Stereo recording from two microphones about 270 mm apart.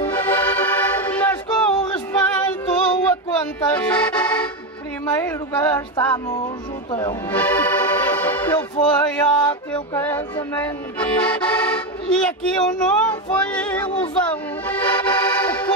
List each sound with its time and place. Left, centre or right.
0.0 s music: centre
3.7 s accordion: centre
5.2 s speech: centre
7.2 s music: centre